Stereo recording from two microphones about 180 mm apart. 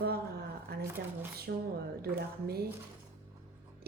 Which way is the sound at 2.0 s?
60° right (ahead or behind).